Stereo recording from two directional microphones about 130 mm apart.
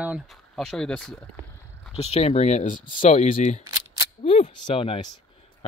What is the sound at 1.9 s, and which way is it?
Speech, 55° left (ahead or behind).